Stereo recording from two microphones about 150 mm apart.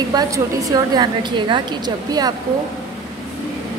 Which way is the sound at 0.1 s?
25° right (ahead or behind).